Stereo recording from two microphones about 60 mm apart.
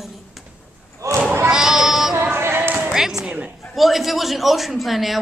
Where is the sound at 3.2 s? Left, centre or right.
Right.